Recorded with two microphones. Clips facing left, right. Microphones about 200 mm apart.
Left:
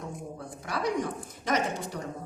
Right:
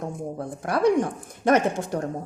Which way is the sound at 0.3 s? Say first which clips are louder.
Right 10 dB; 55° right (ahead or behind).